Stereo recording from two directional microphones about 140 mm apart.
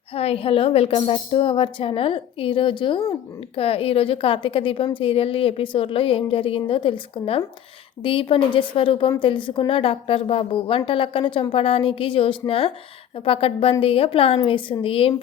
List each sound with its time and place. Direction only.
0.1 s a woman's voice: 45° left (ahead or behind)